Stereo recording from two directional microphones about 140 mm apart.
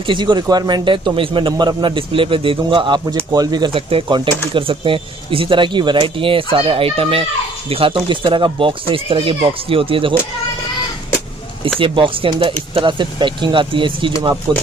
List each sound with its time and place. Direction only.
0.0 s speech: 35° right (ahead or behind)
11.8 s speech: 40° right (ahead or behind)